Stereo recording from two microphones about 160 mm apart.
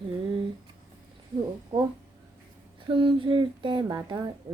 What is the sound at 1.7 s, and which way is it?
Speech, 60° right (ahead or behind).